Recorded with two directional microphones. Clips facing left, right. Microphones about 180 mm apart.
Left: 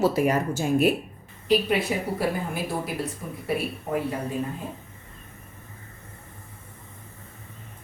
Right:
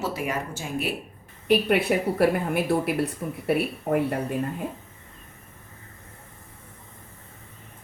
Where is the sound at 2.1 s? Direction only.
65° right (ahead or behind).